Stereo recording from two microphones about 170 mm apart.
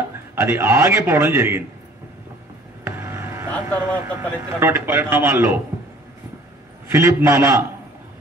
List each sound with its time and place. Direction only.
0.4 s a man's voice: 15° right (ahead or behind)
2.8 s vehicle: 15° right (ahead or behind)
4.0 s a man's voice: 15° right (ahead or behind)
6.9 s a man's voice: 15° right (ahead or behind)